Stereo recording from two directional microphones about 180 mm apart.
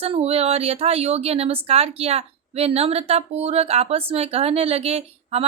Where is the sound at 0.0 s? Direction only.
35° right (ahead or behind).